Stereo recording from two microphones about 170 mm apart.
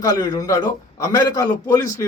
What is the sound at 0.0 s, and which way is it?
A man's voice, 25° left (ahead or behind).